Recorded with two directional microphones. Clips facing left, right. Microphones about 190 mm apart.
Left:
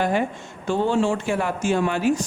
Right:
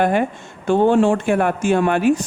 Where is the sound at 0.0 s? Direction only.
55° right (ahead or behind).